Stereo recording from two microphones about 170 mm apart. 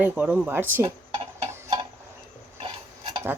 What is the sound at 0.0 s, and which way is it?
Speech, 10° right (ahead or behind).